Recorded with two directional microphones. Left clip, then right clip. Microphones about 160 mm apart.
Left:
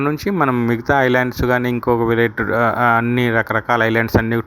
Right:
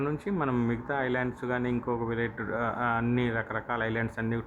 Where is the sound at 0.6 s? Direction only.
40° left (ahead or behind).